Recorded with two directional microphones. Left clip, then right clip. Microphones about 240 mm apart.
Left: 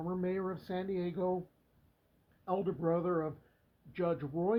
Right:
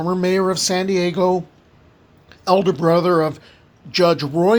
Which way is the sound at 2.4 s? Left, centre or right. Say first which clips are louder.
Right 19 dB; right.